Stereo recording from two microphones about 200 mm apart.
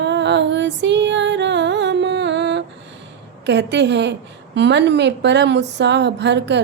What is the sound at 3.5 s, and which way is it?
A woman's voice, 60° right (ahead or behind).